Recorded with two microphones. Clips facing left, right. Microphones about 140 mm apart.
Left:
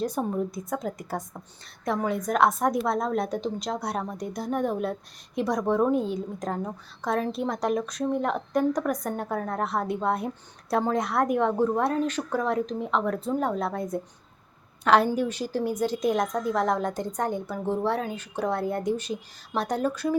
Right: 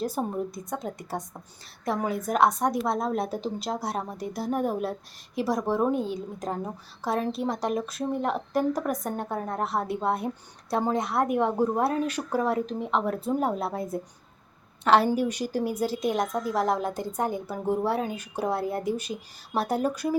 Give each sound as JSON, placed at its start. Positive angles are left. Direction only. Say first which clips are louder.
{"t": 0.0, "sound": "a woman's voice", "louder": "left 1 dB", "side_deg": -5}